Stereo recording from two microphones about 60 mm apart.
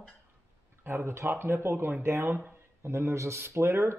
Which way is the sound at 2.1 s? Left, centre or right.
Right.